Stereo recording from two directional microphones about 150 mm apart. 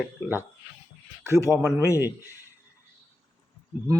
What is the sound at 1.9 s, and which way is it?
Speech, 20° left (ahead or behind).